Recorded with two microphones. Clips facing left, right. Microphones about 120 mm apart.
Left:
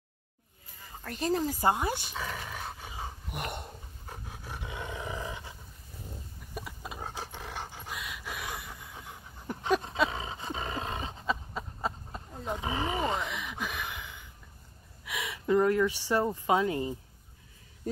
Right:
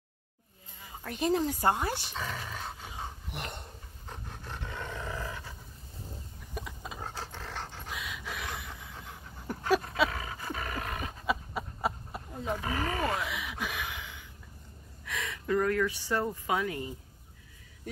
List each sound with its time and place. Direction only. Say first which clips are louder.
0.8 s speech: right 1 dB; 5° right (ahead or behind); by 3.6 s 10° left (ahead or behind)
4.1 s roar: even; 10° left (ahead or behind)
6.5 s dog: even; 5° left (ahead or behind)
7.9 s pant: right 1 dB; centre (ahead or behind)
10.0 s roar: left 1 dB; 25° left (ahead or behind)
11.2 s a sound: right 2 dB; 10° right (ahead or behind)
12.5 s speech: left 2 dB; 20° left (ahead or behind)
13.2 s a sound: even; 5° right (ahead or behind)
15.0 s speech: left 3 dB; 10° left (ahead or behind)